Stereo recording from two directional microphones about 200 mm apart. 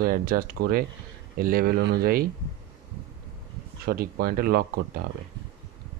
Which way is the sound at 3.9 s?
45° right (ahead or behind).